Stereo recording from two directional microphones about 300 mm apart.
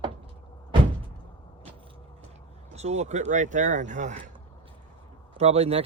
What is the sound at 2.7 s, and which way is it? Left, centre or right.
Speech, right.